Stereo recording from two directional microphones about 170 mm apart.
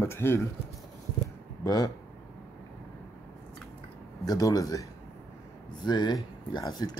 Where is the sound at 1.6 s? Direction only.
20° left (ahead or behind).